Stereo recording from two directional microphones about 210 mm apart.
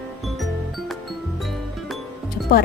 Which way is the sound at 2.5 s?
45° left (ahead or behind).